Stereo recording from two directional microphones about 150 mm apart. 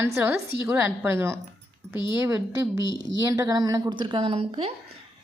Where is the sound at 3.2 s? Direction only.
20° right (ahead or behind).